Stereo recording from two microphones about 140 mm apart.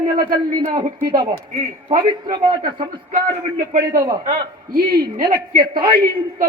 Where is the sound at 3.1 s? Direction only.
75° right (ahead or behind).